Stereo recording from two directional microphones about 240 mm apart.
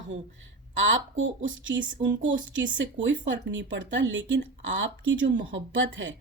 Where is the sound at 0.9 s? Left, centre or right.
Right.